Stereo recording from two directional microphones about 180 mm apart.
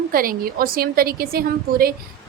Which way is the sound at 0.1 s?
55° right (ahead or behind).